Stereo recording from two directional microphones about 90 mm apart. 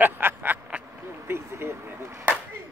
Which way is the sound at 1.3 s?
30° right (ahead or behind).